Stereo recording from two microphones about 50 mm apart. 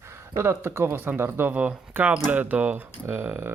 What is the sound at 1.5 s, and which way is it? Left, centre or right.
Speech, right.